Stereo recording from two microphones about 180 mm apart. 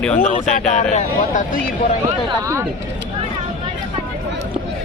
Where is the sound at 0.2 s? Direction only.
45° left (ahead or behind).